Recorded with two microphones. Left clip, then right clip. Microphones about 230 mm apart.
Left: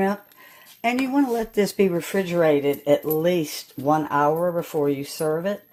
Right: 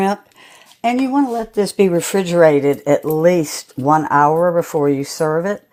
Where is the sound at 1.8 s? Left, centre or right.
Right.